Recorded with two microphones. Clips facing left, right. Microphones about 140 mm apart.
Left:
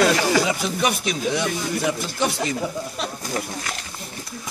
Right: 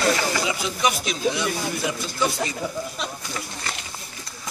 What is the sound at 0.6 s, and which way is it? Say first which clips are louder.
Speech: left 1 dB; 60° left (ahead or behind).